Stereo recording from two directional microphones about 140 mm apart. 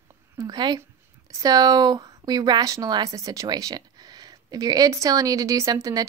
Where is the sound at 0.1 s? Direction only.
25° right (ahead or behind).